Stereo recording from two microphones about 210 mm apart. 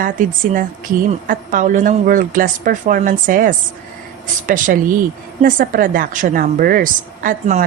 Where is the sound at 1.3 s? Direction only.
40° right (ahead or behind).